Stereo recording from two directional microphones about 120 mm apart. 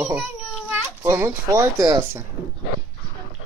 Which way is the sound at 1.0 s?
25° right (ahead or behind).